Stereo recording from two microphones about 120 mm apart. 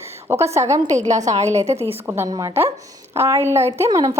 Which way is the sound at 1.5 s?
65° right (ahead or behind).